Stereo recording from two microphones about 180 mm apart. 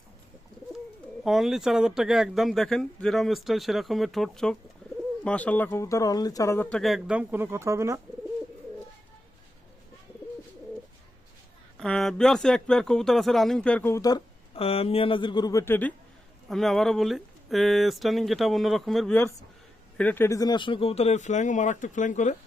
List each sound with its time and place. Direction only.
1.2 s speech: centre (ahead or behind)
4.8 s bird: 5° left (ahead or behind)
5.2 s speech: 5° left (ahead or behind); by 8.0 s 15° right (ahead or behind)
11.8 s speech: 5° left (ahead or behind)
14.5 s speech: 30° left (ahead or behind); by 15.9 s 10° left (ahead or behind)
16.5 s speech: centre (ahead or behind); by 22.4 s 40° left (ahead or behind)